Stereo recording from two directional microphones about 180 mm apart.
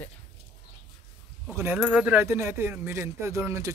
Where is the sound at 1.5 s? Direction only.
15° right (ahead or behind).